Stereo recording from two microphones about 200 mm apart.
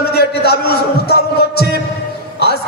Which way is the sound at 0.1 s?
55° left (ahead or behind).